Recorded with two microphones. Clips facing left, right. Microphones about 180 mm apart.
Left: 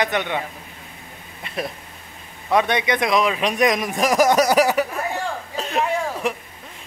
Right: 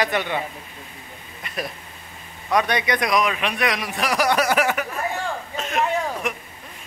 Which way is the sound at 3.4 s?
40° left (ahead or behind).